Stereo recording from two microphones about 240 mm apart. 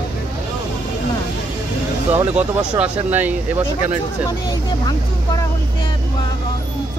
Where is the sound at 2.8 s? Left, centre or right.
Centre.